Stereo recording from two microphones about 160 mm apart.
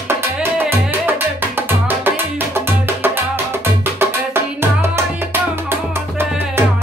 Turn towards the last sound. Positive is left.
turn(degrees=-15)  # may be behind; listen again after turning